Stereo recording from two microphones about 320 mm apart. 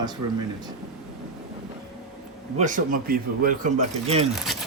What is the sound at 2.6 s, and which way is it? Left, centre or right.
Speech, right.